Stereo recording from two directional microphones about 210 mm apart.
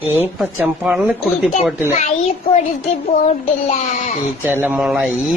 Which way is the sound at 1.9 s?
30° left (ahead or behind).